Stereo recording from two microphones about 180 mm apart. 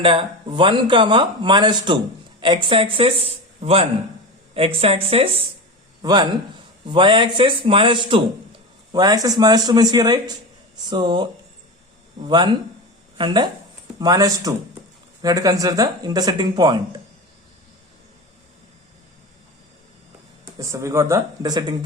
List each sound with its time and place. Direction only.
0.0 s a man's voice: 30° right (ahead or behind)
13.1 s speech: 25° right (ahead or behind)
20.4 s speech: 15° right (ahead or behind)